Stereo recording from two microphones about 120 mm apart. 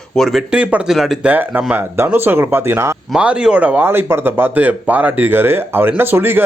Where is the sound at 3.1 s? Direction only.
10° right (ahead or behind).